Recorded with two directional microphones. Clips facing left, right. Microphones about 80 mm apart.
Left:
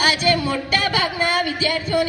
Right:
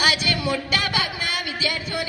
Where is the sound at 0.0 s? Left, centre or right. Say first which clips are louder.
Left 4 dB; left.